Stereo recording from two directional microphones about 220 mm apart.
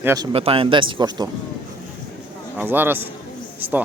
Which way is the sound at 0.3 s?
25° right (ahead or behind).